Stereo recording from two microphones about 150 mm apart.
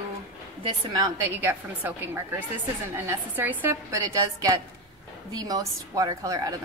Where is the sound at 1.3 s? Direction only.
15° right (ahead or behind).